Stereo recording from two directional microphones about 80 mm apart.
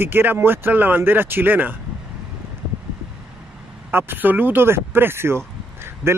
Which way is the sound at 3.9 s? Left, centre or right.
Right.